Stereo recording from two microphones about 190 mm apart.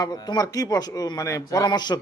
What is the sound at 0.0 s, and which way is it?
A man's voice, 20° left (ahead or behind).